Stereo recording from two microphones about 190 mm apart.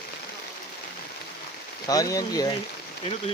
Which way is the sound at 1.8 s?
20° left (ahead or behind).